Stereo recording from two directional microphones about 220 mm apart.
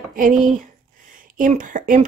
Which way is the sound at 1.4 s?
35° right (ahead or behind).